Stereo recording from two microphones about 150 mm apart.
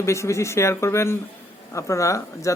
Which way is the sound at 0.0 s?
20° left (ahead or behind).